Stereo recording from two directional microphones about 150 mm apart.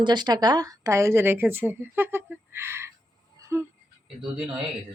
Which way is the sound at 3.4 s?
20° right (ahead or behind).